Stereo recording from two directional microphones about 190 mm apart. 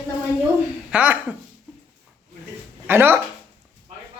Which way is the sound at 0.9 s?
5° right (ahead or behind).